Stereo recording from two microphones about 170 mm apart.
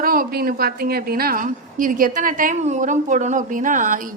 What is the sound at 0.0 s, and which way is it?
A woman's voice, 60° right (ahead or behind).